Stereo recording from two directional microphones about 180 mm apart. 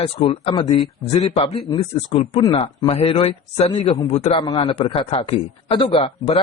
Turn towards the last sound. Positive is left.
turn(degrees=30)  # may be behind; listen again after turning